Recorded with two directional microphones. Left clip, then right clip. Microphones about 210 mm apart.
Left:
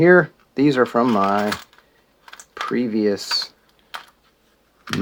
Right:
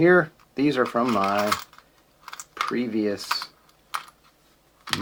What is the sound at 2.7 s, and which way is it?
Speech, 35° left (ahead or behind).